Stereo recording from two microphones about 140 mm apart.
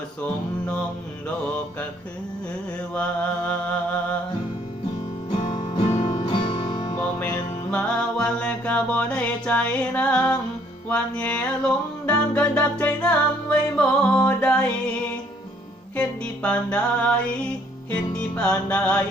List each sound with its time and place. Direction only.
2.9 s mantra: 10° left (ahead or behind)
5.4 s music: 35° left (ahead or behind)
7.7 s music: 10° left (ahead or behind)